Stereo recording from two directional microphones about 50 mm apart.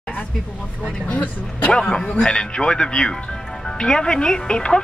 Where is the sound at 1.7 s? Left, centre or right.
Centre.